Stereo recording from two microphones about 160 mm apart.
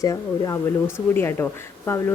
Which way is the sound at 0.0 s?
20° left (ahead or behind).